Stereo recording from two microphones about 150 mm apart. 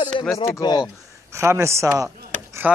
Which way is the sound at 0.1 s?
35° left (ahead or behind).